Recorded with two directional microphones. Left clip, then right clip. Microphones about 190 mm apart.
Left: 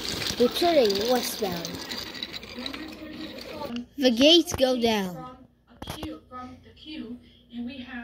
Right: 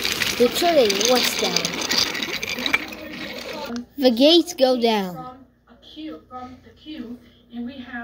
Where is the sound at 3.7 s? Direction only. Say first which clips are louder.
Right 5 dB; 5° right (ahead or behind).